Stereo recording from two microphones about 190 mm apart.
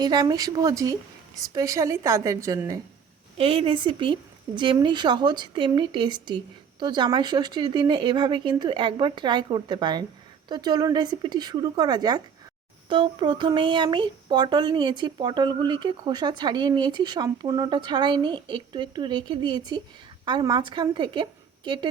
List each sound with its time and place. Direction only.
0.0 s a woman's voice: 20° right (ahead or behind)
3.3 s speech: 30° right (ahead or behind)